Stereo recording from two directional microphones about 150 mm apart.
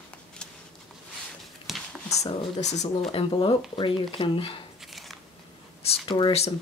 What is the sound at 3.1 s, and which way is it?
Speech, 35° left (ahead or behind).